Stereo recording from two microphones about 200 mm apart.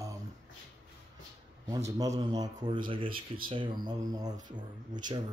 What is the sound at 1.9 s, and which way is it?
Speech, 15° right (ahead or behind).